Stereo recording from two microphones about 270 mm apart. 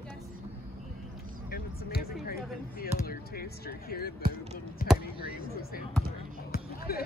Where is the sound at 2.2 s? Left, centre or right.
Left.